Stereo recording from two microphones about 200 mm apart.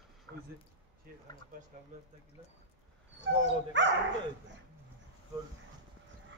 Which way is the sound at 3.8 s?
65° right (ahead or behind).